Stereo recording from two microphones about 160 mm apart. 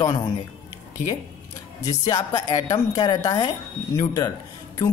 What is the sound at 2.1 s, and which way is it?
Speech, 25° left (ahead or behind).